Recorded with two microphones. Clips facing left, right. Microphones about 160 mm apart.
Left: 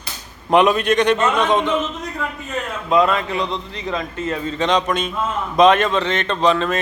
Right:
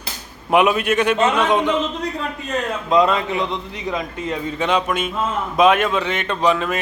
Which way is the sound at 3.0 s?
20° right (ahead or behind).